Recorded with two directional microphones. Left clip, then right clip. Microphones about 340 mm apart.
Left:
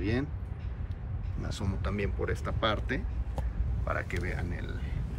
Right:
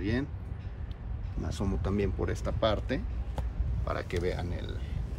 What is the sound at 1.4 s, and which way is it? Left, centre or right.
Speech, centre.